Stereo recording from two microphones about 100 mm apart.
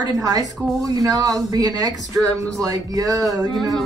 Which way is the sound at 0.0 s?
40° right (ahead or behind).